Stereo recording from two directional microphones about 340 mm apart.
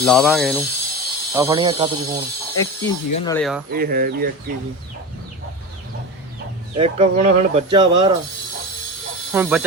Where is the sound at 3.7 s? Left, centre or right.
Right.